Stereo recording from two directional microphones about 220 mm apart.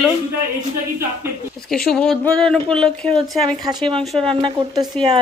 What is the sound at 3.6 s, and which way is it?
Speech, 20° right (ahead or behind).